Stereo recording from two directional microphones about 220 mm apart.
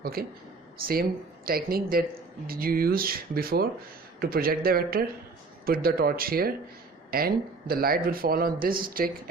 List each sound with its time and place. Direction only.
0.0 s a man's voice: 45° right (ahead or behind)